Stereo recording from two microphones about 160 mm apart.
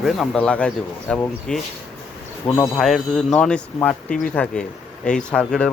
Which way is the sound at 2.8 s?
Centre (ahead or behind).